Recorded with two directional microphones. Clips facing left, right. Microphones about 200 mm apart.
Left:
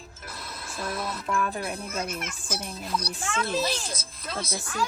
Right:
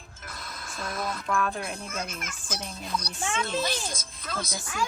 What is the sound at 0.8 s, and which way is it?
Speech, 5° left (ahead or behind).